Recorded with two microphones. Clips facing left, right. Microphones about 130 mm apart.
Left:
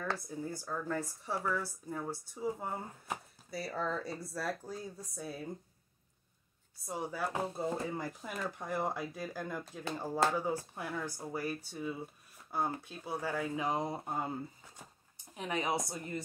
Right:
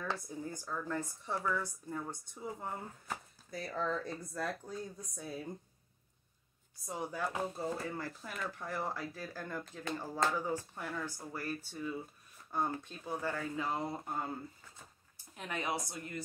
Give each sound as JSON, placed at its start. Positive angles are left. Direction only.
{"t": 0.0, "sound": "speech", "side_deg": 5}
{"t": 6.9, "sound": "speech", "side_deg": 0}
{"t": 7.5, "sound": "speech", "side_deg": 15}
{"t": 15.3, "sound": "speech", "side_deg": 15}